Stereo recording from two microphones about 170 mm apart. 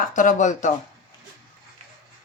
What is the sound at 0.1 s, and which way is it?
Speech, 50° left (ahead or behind).